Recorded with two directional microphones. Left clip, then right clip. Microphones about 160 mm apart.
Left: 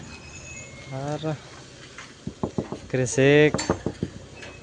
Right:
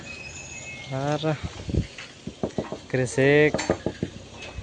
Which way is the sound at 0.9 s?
15° right (ahead or behind).